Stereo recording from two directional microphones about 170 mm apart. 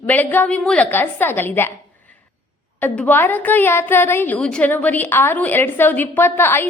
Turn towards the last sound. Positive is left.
turn(degrees=15)  # may be behind; listen again after turning